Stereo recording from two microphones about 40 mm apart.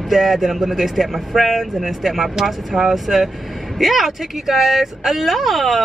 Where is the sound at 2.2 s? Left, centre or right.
Centre.